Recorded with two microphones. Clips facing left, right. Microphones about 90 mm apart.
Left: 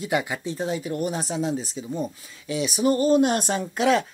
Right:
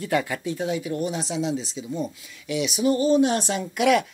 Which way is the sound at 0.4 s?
30° left (ahead or behind).